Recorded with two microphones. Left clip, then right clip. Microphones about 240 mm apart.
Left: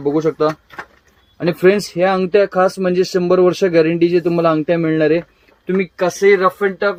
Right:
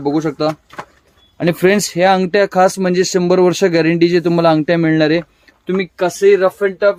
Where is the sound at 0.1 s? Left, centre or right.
Right.